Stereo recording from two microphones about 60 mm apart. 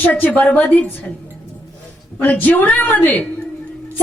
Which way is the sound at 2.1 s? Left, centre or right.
Left.